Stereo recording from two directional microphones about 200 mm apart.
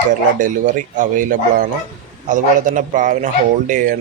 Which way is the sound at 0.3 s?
40° right (ahead or behind).